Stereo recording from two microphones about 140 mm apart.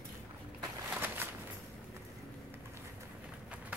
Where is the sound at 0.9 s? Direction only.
15° right (ahead or behind).